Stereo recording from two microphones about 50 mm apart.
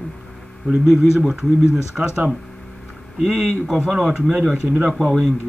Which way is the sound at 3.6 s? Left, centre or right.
Centre.